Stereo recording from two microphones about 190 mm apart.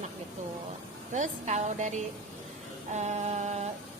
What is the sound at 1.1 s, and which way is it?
A woman's voice, 40° right (ahead or behind).